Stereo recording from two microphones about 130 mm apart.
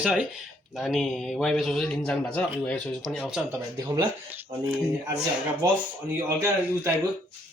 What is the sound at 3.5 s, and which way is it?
Speech, 25° right (ahead or behind).